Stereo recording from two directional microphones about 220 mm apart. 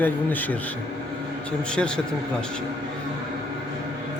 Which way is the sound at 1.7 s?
5° left (ahead or behind).